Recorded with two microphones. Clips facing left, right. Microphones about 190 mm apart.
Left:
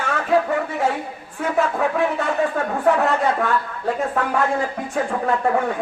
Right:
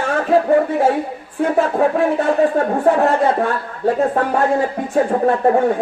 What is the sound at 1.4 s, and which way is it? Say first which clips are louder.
Speech: right 5 dB; 35° right (ahead or behind).